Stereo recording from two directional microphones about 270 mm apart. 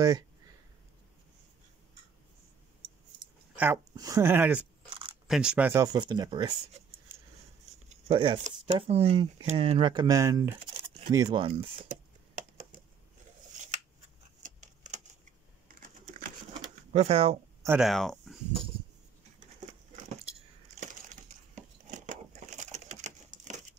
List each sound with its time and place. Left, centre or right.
3.5 s speech: centre
4.8 s biting: centre
5.3 s speech: centre
7.9 s speech: right
10.8 s a sound: centre
13.5 s scissors: right
14.4 s tick-tock: right
16.9 s speech: right
17.6 s speech: centre
20.8 s a sound: right
22.6 s typewriter: right